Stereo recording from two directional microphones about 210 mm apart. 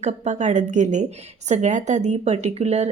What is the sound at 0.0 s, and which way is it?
A woman's voice, 35° right (ahead or behind).